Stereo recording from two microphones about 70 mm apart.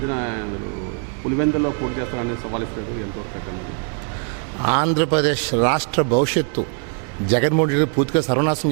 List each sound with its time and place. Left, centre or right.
0.1 s speech: right
4.6 s a man's voice: centre